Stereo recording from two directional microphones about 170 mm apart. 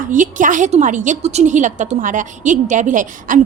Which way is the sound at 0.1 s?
50° right (ahead or behind).